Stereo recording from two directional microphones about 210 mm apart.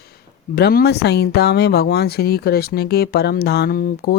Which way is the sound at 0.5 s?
50° left (ahead or behind).